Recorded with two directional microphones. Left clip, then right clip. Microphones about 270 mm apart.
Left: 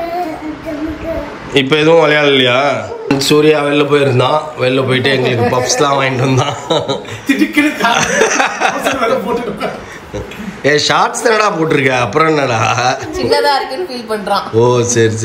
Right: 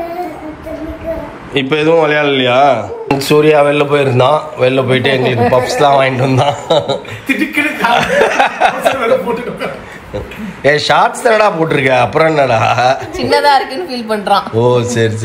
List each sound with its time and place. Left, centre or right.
1.5 s a man's voice: centre
10.6 s a man's voice: centre
13.3 s speech: right
14.5 s a man's voice: centre